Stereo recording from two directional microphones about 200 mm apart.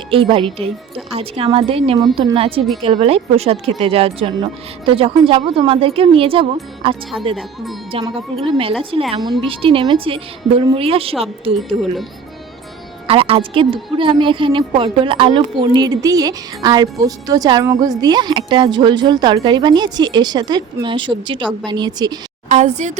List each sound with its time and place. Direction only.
0.1 s a woman's voice: 25° right (ahead or behind)
7.3 s speech: centre (ahead or behind)
8.4 s a woman's voice: 25° right (ahead or behind)
13.1 s a woman's voice: 30° right (ahead or behind)
22.4 s speech: 35° right (ahead or behind)